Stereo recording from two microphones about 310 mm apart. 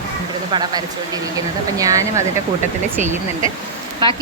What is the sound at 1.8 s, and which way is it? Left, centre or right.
Speech, centre.